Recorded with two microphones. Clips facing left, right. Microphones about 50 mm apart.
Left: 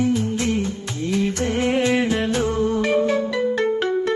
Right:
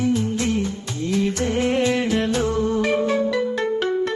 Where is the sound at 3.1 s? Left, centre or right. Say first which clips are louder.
Even; centre.